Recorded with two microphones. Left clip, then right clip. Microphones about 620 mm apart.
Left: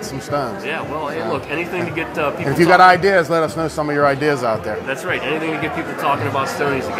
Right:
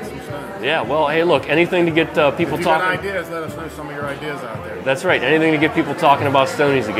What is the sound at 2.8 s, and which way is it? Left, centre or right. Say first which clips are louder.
Speech: left 10 dB; left.